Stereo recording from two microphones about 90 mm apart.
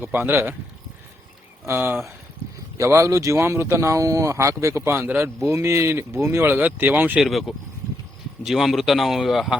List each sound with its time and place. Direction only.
0.0 s speech: 25° right (ahead or behind)
1.6 s speech: 25° right (ahead or behind)
7.2 s a man's voice: centre (ahead or behind)